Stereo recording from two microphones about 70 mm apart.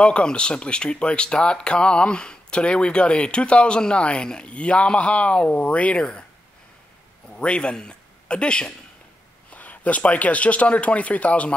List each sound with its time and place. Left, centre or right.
0.0 s speech: centre
7.2 s a man's voice: centre